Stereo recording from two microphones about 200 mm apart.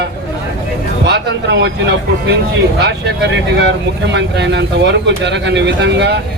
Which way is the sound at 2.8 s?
60° right (ahead or behind).